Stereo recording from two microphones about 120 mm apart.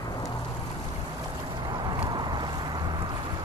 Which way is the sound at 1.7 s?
40° right (ahead or behind).